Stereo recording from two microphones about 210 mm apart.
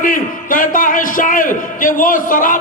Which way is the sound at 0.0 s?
40° left (ahead or behind).